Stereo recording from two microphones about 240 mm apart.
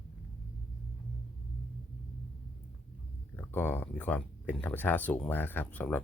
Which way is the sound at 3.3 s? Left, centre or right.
Centre.